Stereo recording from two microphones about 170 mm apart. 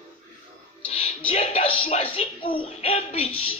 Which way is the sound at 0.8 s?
35° left (ahead or behind).